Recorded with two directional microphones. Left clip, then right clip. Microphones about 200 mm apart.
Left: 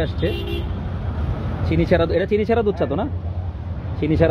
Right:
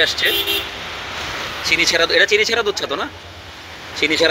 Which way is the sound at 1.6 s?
5° left (ahead or behind).